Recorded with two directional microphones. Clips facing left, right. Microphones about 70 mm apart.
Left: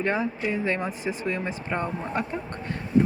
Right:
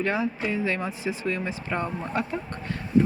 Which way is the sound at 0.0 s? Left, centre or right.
Left.